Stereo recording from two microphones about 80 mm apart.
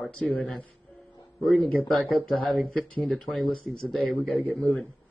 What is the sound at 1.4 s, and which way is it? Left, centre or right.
Speech, centre.